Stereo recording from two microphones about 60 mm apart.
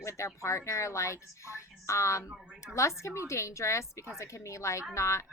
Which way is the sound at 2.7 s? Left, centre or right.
Left.